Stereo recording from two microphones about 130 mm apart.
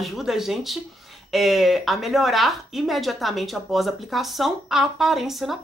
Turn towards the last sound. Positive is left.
turn(degrees=0)  # may be behind; listen again after turning